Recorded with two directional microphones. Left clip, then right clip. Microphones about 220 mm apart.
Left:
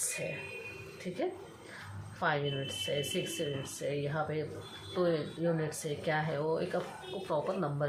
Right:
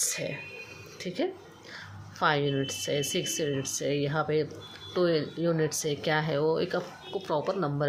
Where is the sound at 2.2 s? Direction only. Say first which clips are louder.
Right 6 dB; 50° right (ahead or behind).